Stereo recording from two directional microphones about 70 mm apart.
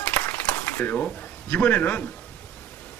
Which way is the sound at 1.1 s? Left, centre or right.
Left.